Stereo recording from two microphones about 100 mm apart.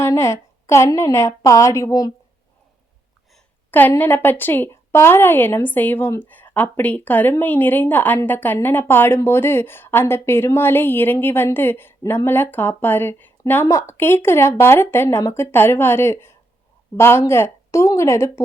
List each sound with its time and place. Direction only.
0.0 s a woman's voice: 25° left (ahead or behind)
3.7 s speech: 20° left (ahead or behind)